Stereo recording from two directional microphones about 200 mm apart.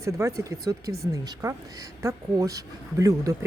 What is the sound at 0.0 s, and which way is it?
Speech, 15° right (ahead or behind).